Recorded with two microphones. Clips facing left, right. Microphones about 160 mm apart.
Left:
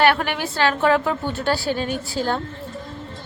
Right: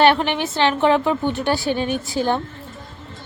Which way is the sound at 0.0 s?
25° right (ahead or behind).